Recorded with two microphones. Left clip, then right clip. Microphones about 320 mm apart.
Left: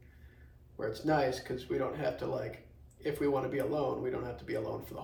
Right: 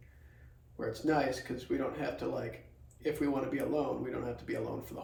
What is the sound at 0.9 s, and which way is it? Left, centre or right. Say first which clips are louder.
Speech: left 1 dB; centre.